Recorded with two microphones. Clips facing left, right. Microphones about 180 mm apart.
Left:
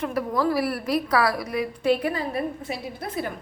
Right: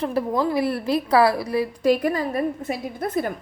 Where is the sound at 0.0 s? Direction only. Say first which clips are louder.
Right 2 dB; 30° right (ahead or behind); by 3.3 s 45° right (ahead or behind).